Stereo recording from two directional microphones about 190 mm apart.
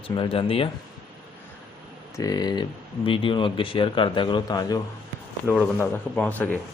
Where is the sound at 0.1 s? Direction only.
25° left (ahead or behind).